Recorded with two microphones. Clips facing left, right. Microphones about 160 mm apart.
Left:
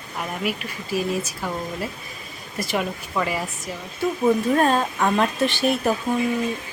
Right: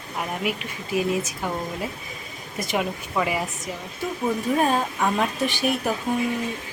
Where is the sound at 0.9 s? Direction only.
20° right (ahead or behind).